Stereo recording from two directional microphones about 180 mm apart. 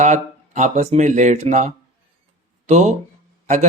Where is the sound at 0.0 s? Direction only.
40° right (ahead or behind).